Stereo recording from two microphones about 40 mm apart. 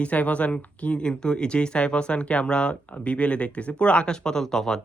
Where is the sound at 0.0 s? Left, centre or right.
Left.